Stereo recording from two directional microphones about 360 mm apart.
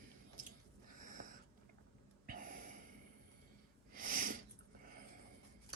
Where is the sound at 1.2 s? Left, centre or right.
Right.